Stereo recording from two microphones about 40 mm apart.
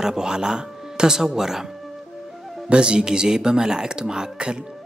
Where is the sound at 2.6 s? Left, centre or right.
Right.